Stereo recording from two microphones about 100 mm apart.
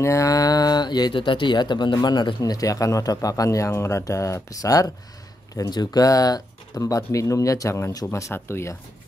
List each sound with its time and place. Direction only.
0.0 s speech: 30° left (ahead or behind)